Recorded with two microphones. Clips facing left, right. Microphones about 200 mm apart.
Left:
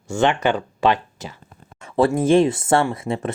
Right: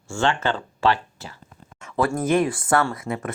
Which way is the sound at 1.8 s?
30° left (ahead or behind).